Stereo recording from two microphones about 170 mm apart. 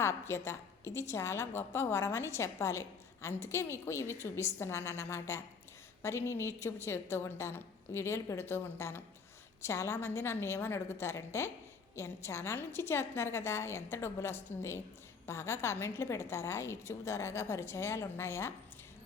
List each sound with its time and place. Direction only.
0.0 s a woman's voice: 15° left (ahead or behind)